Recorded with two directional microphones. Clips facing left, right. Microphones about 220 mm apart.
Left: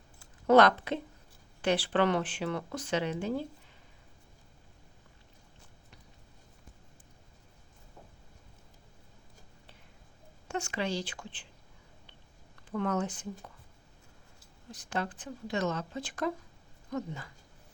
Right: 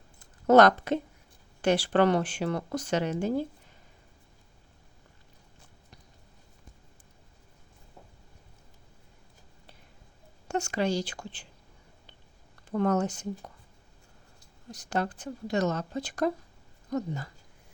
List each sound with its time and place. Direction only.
0.4 s speech: 45° right (ahead or behind)
10.5 s speech: 40° right (ahead or behind)
12.7 s speech: 40° right (ahead or behind)
14.7 s speech: 40° right (ahead or behind)